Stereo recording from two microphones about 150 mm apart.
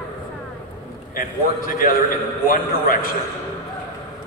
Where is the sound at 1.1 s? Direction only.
70° left (ahead or behind).